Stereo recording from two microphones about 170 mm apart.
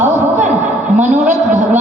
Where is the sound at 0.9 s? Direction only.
45° right (ahead or behind).